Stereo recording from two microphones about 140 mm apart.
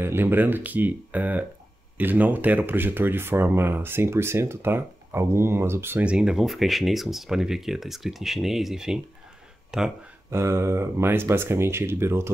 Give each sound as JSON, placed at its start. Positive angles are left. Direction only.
{"t": 0.0, "sound": "speech", "side_deg": -15}
{"t": 10.3, "sound": "speech", "side_deg": -20}